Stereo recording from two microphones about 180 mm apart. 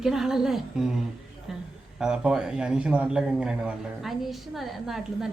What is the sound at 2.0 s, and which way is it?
A man's voice, 5° right (ahead or behind).